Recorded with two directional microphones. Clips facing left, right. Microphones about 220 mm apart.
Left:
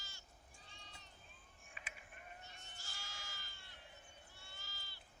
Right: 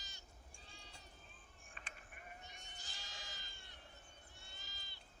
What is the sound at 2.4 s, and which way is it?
Sheep, 15° right (ahead or behind).